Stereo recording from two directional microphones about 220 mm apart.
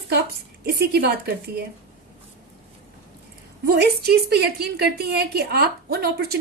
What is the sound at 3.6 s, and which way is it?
A woman's voice, 45° right (ahead or behind).